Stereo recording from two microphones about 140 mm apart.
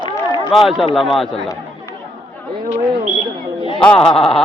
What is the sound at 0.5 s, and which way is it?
Speech, centre (ahead or behind).